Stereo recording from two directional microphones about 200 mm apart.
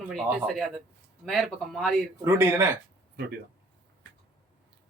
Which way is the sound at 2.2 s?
10° right (ahead or behind).